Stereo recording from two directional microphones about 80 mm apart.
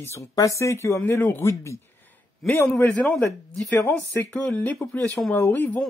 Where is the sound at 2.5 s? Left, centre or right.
Left.